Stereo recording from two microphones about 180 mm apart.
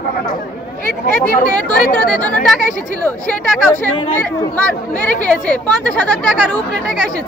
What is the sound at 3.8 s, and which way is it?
Speech, 10° left (ahead or behind).